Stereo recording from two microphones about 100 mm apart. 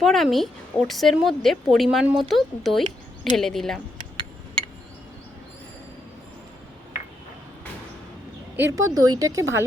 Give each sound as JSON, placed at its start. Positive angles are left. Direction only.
{"t": 0.0, "sound": "a woman's voice", "side_deg": 5}
{"t": 8.5, "sound": "a woman's voice", "side_deg": -30}